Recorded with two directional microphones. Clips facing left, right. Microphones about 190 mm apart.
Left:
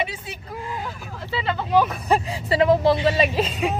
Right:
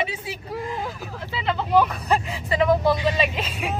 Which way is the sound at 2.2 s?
35° left (ahead or behind).